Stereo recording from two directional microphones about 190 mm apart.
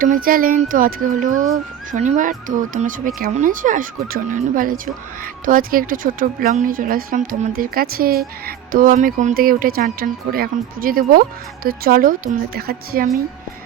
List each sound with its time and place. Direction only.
0.0 s speech: 45° right (ahead or behind)